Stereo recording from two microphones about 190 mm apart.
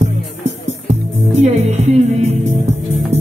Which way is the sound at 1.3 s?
35° right (ahead or behind).